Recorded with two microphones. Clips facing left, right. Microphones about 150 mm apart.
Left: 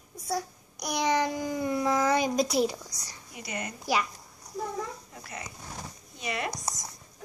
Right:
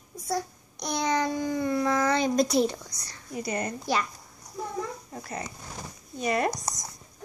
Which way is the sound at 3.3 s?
40° right (ahead or behind).